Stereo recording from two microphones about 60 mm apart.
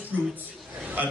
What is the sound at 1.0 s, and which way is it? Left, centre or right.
Speech, right.